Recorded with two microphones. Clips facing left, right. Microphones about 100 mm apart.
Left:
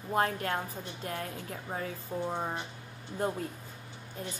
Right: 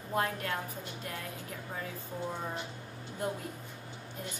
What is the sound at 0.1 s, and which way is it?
Speech, 30° left (ahead or behind).